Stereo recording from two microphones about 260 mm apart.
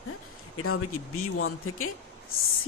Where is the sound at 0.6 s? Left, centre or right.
Left.